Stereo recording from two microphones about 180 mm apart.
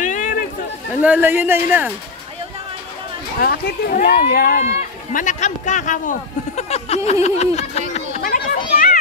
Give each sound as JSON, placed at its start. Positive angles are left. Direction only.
{"t": 0.0, "sound": "a sound", "side_deg": 45}
{"t": 1.0, "sound": "speech", "side_deg": -10}
{"t": 3.3, "sound": "speech", "side_deg": 60}
{"t": 4.6, "sound": "speech", "side_deg": 45}
{"t": 7.1, "sound": "a sound", "side_deg": 35}
{"t": 8.2, "sound": "children playing", "side_deg": 50}